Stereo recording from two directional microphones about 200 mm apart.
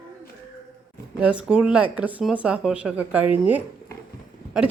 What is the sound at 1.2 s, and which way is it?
Speech, 5° right (ahead or behind).